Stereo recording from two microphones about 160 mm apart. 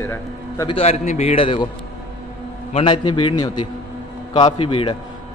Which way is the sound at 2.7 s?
30° left (ahead or behind).